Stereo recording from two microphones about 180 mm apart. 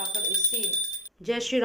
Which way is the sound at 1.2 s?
Centre (ahead or behind).